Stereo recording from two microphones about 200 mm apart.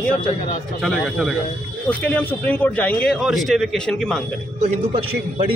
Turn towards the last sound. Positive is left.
turn(degrees=-30)  # may be behind; listen again after turning